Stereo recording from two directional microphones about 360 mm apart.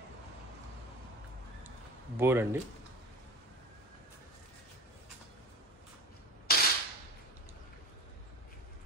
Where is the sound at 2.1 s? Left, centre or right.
Centre.